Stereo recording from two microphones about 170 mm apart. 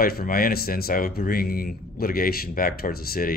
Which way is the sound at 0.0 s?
60° left (ahead or behind).